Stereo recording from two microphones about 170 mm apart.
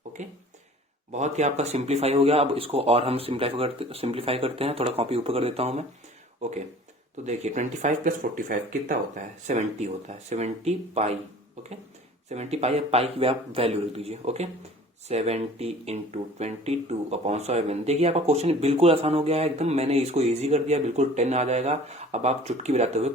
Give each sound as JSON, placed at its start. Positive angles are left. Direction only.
{"t": 0.2, "sound": "speech", "side_deg": -45}
{"t": 12.3, "sound": "speech", "side_deg": -40}